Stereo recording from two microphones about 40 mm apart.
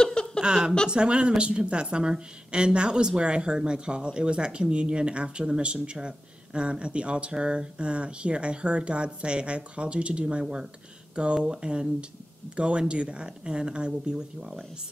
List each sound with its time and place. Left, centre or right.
0.0 s chuckle: centre
0.4 s a woman's voice: right
10.4 s a woman's voice: centre